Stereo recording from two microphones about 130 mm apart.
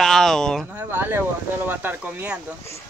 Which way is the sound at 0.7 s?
15° right (ahead or behind).